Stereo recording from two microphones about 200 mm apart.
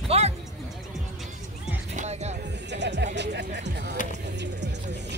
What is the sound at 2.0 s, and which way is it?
Music, 35° right (ahead or behind).